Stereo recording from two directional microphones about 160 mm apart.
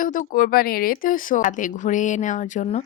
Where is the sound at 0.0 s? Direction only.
55° left (ahead or behind).